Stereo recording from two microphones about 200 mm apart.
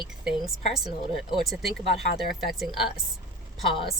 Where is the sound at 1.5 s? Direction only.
Centre (ahead or behind).